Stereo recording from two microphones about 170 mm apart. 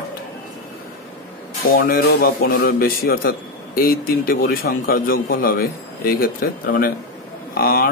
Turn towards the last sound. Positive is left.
turn(degrees=60)  # may be behind; listen again after turning